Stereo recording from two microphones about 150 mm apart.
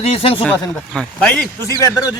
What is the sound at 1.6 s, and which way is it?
Speech, 20° left (ahead or behind).